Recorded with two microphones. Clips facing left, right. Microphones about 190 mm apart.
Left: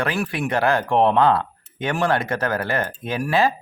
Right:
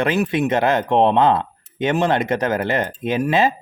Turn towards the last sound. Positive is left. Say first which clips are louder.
# right 3 dB
turn(degrees=-20)  # may be behind; listen again after turning